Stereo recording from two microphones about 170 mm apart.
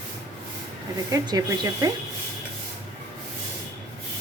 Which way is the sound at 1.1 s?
20° right (ahead or behind).